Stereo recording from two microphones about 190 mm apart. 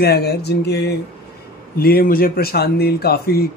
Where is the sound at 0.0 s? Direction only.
55° left (ahead or behind).